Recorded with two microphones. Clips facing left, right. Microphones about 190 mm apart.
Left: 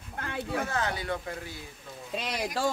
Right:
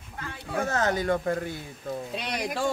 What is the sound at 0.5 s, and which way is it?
Speech, 45° right (ahead or behind).